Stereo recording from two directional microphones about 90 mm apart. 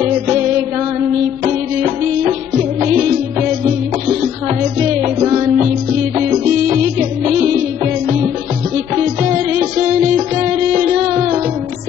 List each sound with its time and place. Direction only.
5.0 s music: 25° right (ahead or behind)
9.6 s music: 15° right (ahead or behind)